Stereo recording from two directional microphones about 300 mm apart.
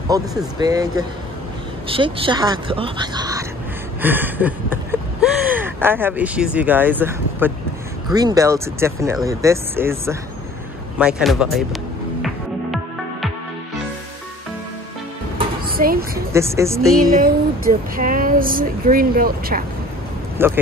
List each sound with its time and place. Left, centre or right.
0.1 s speech: centre
15.6 s a sound: right
16.3 s speech: centre
17.1 s speech: right
20.3 s speech: centre